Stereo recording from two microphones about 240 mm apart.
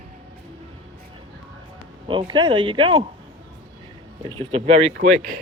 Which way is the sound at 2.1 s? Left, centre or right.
Centre.